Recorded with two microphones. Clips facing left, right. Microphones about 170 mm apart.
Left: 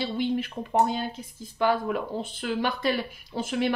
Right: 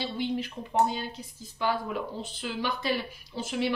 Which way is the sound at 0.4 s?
55° left (ahead or behind).